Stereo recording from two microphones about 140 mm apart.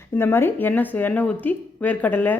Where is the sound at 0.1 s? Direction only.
15° left (ahead or behind).